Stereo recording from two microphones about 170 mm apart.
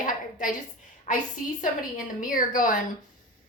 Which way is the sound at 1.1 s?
50° left (ahead or behind).